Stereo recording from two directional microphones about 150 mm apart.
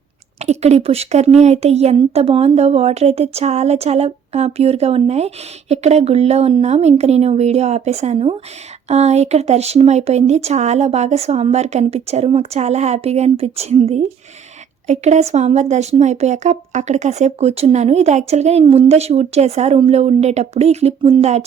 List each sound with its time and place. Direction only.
0.3 s a woman's voice: 45° right (ahead or behind)